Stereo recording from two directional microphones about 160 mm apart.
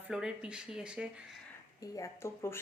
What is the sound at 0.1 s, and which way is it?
Speech, 5° right (ahead or behind).